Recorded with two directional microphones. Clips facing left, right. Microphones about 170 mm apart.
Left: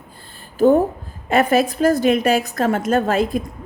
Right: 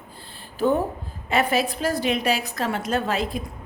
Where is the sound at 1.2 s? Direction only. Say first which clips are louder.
Left 6 dB; 50° left (ahead or behind).